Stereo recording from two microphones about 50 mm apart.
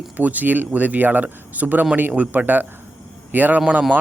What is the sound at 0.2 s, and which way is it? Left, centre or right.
Speech, right.